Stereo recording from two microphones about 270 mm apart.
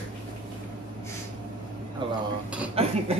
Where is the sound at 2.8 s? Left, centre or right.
Right.